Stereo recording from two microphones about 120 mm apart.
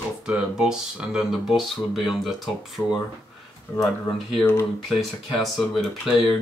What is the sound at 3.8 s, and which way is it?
Speech, centre (ahead or behind).